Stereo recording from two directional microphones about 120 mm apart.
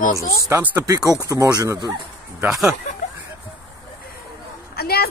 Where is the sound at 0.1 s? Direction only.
25° left (ahead or behind).